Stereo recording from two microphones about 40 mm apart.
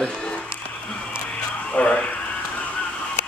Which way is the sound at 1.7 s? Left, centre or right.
Left.